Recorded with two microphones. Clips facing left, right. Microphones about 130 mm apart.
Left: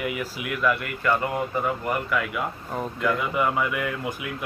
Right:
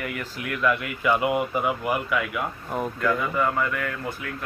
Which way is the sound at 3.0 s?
15° left (ahead or behind).